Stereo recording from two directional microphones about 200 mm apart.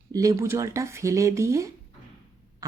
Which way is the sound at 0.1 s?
15° right (ahead or behind).